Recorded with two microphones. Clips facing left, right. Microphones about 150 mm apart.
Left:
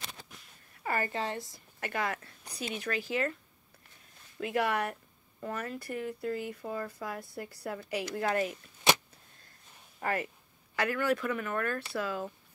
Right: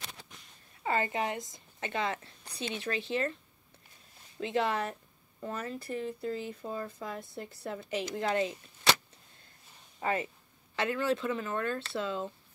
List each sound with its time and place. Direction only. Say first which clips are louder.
0.8 s a woman's voice: right 2 dB; 20° right (ahead or behind)
4.4 s speech: even; 25° right (ahead or behind)
9.9 s speech: right 1 dB; 20° right (ahead or behind)